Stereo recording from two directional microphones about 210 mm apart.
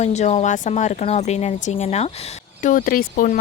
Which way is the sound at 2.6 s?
40° left (ahead or behind).